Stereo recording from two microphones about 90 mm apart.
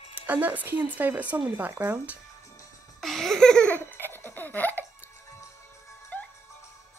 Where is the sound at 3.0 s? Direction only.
Centre (ahead or behind); by 4.8 s 20° left (ahead or behind).